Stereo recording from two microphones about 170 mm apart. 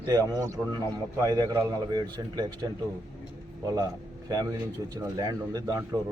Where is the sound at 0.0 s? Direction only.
20° right (ahead or behind).